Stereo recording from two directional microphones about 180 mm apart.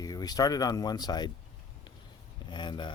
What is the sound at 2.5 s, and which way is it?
Speech, 25° left (ahead or behind).